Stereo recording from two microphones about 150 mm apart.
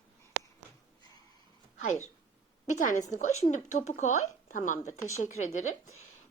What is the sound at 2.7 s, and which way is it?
A woman's voice, 55° left (ahead or behind).